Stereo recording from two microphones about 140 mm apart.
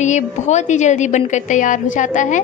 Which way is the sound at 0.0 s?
55° left (ahead or behind).